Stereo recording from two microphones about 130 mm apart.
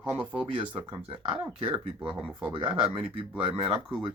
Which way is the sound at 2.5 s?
45° right (ahead or behind).